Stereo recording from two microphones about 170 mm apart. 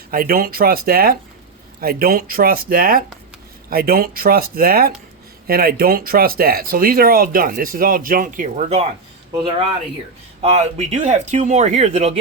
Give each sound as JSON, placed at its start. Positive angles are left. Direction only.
{"t": 0.1, "sound": "speech", "side_deg": -60}
{"t": 9.4, "sound": "speech", "side_deg": -30}